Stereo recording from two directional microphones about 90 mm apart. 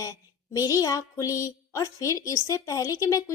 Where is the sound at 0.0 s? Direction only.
40° left (ahead or behind).